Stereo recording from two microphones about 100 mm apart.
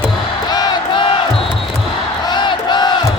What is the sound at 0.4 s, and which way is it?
Crowd, 45° left (ahead or behind).